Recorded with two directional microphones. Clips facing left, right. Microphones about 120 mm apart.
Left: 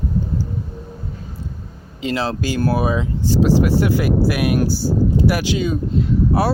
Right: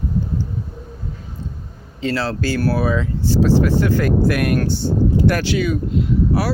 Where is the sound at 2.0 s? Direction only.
15° left (ahead or behind).